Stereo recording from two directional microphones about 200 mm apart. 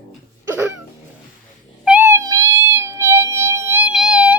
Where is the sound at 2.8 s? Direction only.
10° right (ahead or behind).